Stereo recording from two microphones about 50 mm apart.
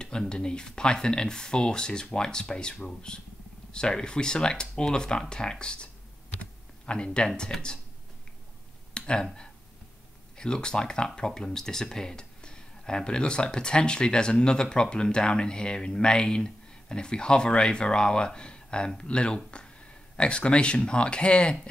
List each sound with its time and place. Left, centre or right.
0.3 s speech: centre
6.9 s speech: centre
8.9 s speech: centre